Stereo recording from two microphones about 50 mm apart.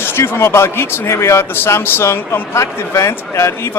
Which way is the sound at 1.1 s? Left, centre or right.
Left.